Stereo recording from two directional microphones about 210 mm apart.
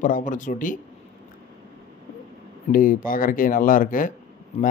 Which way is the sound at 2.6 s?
40° left (ahead or behind).